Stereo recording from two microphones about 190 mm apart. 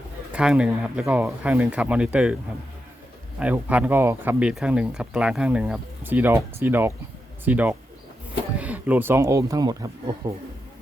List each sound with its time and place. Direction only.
0.3 s speech: 5° right (ahead or behind)
3.4 s speech: 5° right (ahead or behind)